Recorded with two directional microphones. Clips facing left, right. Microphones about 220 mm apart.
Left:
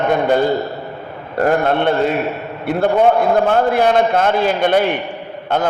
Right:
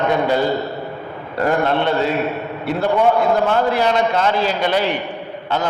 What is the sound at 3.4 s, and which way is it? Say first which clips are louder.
A man's voice: left 3 dB; 55° left (ahead or behind).